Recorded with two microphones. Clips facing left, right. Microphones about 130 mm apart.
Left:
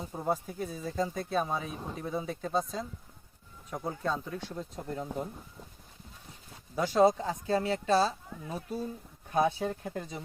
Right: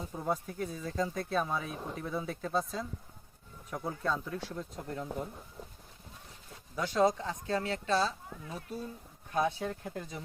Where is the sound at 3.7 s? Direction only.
10° left (ahead or behind).